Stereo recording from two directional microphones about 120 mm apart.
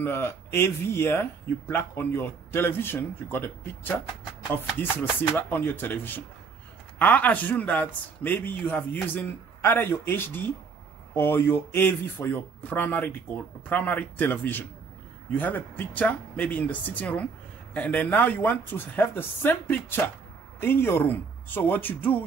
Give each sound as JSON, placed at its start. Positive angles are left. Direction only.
{"t": 0.0, "sound": "speech", "side_deg": 20}
{"t": 5.2, "sound": "a man's voice", "side_deg": 20}